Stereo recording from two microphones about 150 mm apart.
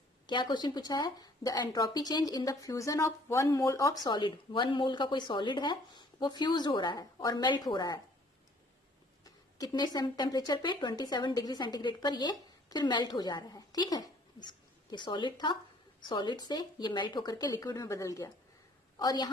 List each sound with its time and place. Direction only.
0.3 s speech: 30° left (ahead or behind)
9.2 s a woman's voice: 25° left (ahead or behind)